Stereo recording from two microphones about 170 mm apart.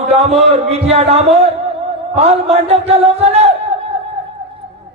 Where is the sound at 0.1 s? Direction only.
40° right (ahead or behind).